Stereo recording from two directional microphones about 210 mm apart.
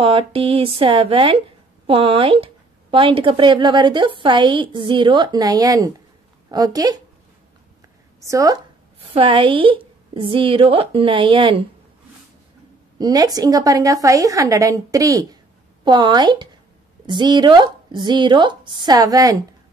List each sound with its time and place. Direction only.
0.0 s a woman's voice: 25° right (ahead or behind)
8.2 s a woman's voice: 15° right (ahead or behind)
13.0 s a woman's voice: 20° right (ahead or behind)